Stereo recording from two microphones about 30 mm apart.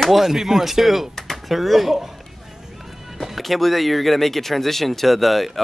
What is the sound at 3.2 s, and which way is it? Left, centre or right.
Speech, centre.